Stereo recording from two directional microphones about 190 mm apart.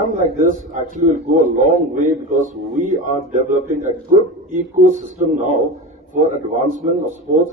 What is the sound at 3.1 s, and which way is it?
A man's voice, 40° right (ahead or behind).